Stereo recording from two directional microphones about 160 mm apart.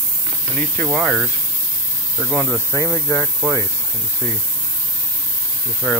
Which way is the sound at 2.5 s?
15° left (ahead or behind).